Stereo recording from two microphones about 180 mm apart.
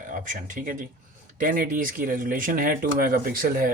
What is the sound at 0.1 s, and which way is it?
Speech, 45° right (ahead or behind).